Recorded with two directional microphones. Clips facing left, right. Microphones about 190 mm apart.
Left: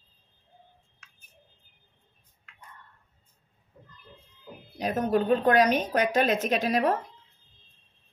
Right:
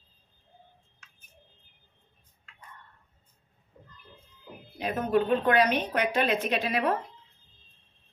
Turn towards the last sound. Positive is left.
turn(degrees=40)  # may be behind; listen again after turning